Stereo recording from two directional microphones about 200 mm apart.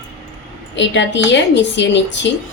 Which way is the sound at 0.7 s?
65° left (ahead or behind).